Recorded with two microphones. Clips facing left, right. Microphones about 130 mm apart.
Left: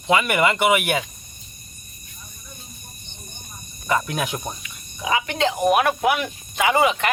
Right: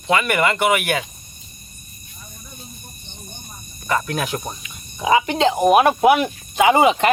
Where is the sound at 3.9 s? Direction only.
10° left (ahead or behind).